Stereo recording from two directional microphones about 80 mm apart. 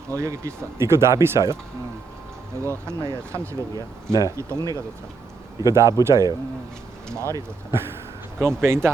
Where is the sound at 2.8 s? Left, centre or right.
Right.